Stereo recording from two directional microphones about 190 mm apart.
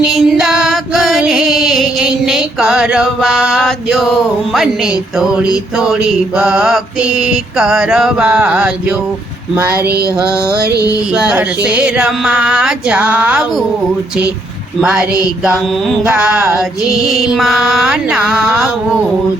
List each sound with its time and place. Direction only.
0.0 s music: centre (ahead or behind)
5.3 s mantra: 5° right (ahead or behind)
10.6 s a sound: 60° right (ahead or behind)
11.1 s mantra: 5° right (ahead or behind)
14.8 s mantra: 5° right (ahead or behind)